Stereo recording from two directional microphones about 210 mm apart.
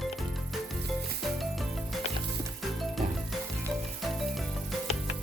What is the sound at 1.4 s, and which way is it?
Music, centre (ahead or behind).